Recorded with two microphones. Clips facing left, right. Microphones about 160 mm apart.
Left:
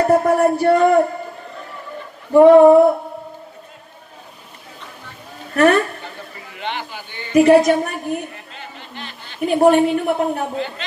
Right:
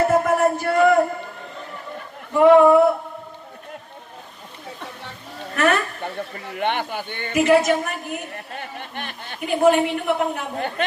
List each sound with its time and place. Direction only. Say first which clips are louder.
0.0 s speech: left 3 dB; 35° left (ahead or behind)
2.3 s a woman's voice: left 5 dB; 35° left (ahead or behind)
5.6 s a woman's voice: left 6 dB; 35° left (ahead or behind)
6.5 s a man's voice: right 4 dB; 55° right (ahead or behind)
7.3 s a woman's voice: left 5 dB; 35° left (ahead or behind)
8.5 s a sound: right 4 dB; 55° right (ahead or behind)
9.5 s a woman's voice: left 4 dB; 40° left (ahead or behind)